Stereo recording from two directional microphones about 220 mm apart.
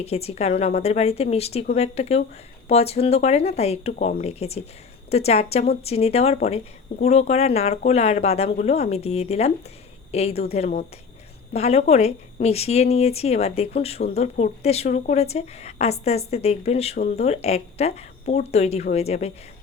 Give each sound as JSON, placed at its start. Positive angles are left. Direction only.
{"t": 0.0, "sound": "a woman's voice", "side_deg": 25}